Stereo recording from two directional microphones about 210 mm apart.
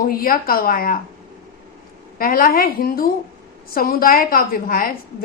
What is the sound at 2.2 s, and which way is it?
A woman's voice, 40° left (ahead or behind).